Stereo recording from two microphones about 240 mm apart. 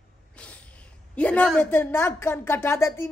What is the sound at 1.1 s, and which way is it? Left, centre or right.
A woman's voice, centre.